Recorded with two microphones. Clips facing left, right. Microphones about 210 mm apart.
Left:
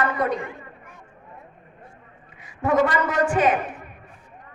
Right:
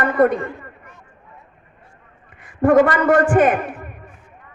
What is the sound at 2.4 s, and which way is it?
A man's voice, 55° right (ahead or behind).